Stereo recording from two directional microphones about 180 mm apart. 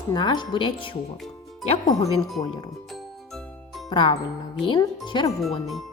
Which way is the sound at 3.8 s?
25° left (ahead or behind).